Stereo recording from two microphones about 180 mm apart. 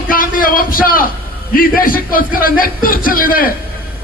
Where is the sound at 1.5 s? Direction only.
55° left (ahead or behind).